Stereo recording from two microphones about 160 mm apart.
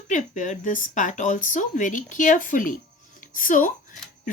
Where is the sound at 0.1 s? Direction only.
50° left (ahead or behind).